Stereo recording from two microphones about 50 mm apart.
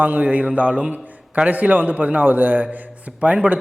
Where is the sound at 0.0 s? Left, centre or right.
Right.